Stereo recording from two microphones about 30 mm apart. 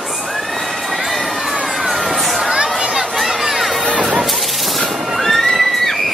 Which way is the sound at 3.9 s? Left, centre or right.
Right.